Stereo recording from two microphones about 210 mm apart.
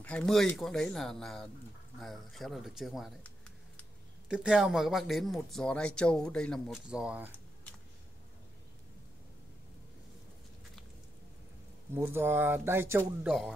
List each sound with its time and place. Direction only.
0.0 s speech: 5° left (ahead or behind)
11.9 s speech: 10° right (ahead or behind)